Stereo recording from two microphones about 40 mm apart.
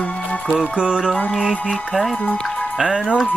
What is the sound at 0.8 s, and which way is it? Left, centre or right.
Mantra, right.